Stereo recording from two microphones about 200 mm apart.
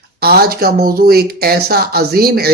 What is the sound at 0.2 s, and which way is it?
Speech, 50° right (ahead or behind).